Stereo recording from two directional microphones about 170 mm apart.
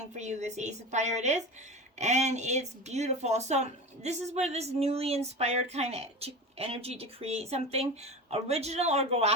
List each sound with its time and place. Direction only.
0.2 s a woman's voice: 40° right (ahead or behind)